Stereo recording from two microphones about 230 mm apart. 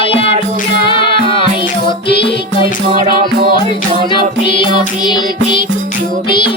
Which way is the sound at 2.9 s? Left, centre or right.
Right.